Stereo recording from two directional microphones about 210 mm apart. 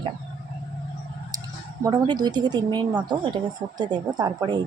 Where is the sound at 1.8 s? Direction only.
20° right (ahead or behind).